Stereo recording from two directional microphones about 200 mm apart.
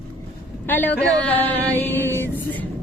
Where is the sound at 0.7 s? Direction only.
10° left (ahead or behind).